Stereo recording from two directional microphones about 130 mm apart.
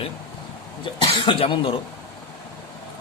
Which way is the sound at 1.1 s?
40° left (ahead or behind).